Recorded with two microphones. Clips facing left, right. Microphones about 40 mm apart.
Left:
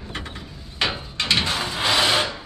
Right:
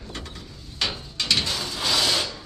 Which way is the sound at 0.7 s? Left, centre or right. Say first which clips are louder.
Left 4 dB; left.